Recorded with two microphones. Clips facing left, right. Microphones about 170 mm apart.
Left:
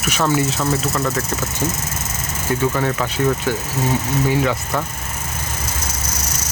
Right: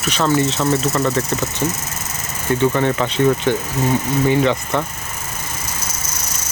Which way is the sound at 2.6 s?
5° left (ahead or behind).